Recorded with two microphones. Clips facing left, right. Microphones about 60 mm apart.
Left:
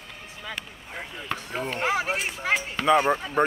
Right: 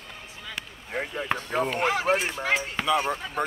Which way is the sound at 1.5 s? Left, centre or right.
Centre.